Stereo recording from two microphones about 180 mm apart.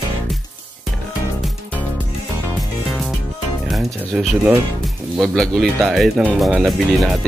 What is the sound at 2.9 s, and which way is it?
Music, centre (ahead or behind).